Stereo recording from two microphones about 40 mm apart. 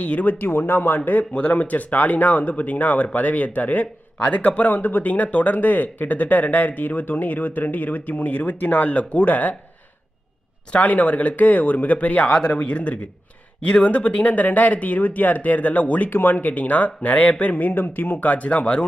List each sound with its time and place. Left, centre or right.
0.0 s speech: left
4.8 s speech: left
5.1 s speech: left
10.7 s speech: left
16.0 s speech: left
17.5 s speech: left